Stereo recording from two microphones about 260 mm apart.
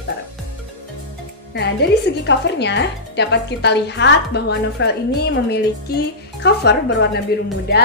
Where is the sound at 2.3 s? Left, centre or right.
Left.